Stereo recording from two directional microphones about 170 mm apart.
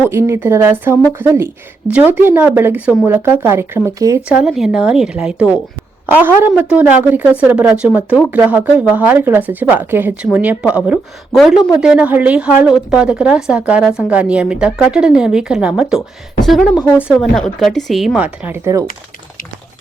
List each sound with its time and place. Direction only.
0.1 s a woman's voice: 15° right (ahead or behind)
4.3 s a woman's voice: 5° right (ahead or behind)